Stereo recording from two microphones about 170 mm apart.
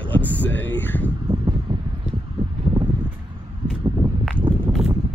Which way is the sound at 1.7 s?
25° right (ahead or behind).